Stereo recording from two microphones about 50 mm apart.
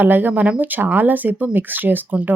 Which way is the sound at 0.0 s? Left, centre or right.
Right.